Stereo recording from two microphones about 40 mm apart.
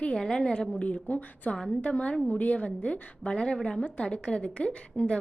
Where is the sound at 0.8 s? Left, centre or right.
Left.